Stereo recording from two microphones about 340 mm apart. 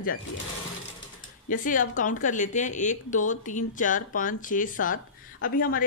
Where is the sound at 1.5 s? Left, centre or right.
Left.